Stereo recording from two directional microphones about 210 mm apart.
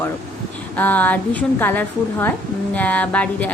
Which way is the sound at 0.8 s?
10° left (ahead or behind).